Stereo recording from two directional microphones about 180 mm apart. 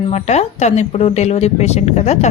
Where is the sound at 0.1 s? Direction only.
40° left (ahead or behind).